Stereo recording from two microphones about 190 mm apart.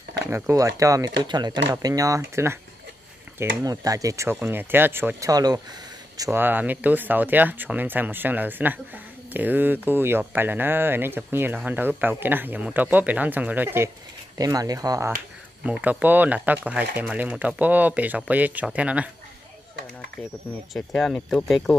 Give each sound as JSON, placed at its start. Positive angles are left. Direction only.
{"t": 0.3, "sound": "speech", "side_deg": -15}
{"t": 20.7, "sound": "speech", "side_deg": 5}